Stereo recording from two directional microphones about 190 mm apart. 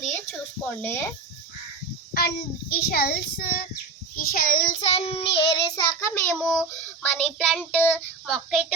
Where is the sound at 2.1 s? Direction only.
50° left (ahead or behind); by 5.6 s 30° left (ahead or behind).